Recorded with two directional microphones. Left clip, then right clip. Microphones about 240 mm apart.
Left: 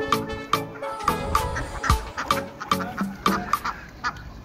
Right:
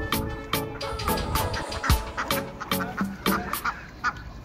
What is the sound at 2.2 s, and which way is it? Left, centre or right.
Music, centre.